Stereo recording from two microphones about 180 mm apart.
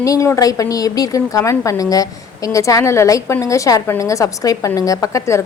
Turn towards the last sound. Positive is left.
turn(degrees=15)  # may be behind; listen again after turning